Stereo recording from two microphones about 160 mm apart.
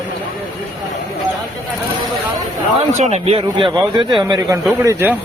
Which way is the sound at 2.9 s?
45° right (ahead or behind).